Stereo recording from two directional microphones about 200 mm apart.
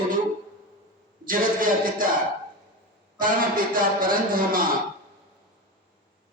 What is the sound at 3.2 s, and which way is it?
Speech, 45° right (ahead or behind).